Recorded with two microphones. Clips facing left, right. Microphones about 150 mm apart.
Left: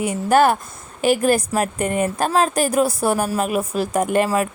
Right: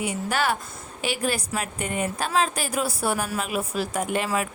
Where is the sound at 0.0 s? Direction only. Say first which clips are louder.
Left 10 dB; 50° left (ahead or behind).